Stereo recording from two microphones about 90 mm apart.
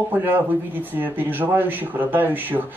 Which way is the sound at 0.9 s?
20° right (ahead or behind).